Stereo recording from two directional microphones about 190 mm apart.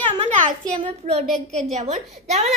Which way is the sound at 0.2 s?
40° right (ahead or behind).